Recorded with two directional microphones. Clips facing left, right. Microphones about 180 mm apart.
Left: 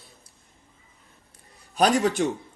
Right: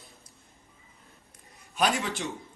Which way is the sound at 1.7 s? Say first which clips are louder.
Left 7 dB; 40° left (ahead or behind).